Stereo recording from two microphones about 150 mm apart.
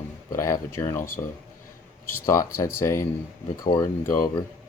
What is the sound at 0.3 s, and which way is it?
Speech, 20° left (ahead or behind).